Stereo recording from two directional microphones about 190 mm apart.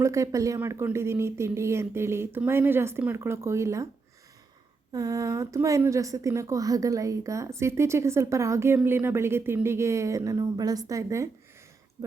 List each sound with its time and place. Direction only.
0.0 s a woman's voice: 15° right (ahead or behind)
4.9 s a woman's voice: 20° right (ahead or behind)
12.0 s a sound: 20° right (ahead or behind)